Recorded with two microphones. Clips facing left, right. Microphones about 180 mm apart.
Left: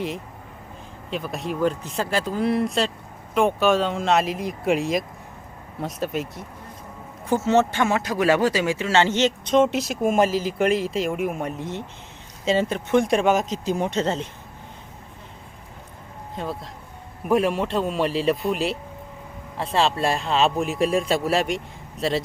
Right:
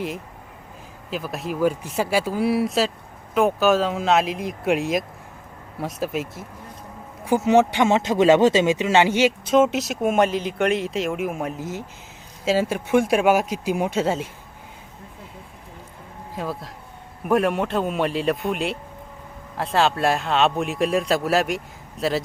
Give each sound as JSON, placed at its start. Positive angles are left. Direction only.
{"t": 1.1, "sound": "speech", "side_deg": 0}
{"t": 7.3, "sound": "speech", "side_deg": -15}
{"t": 16.3, "sound": "speech", "side_deg": 0}